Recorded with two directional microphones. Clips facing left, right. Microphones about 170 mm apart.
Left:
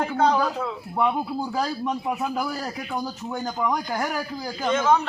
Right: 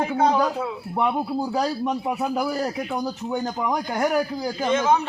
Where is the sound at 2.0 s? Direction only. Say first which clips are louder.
Right 2 dB; 15° right (ahead or behind).